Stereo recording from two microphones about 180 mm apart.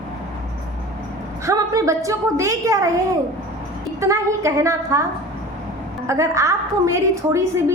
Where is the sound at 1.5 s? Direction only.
15° right (ahead or behind).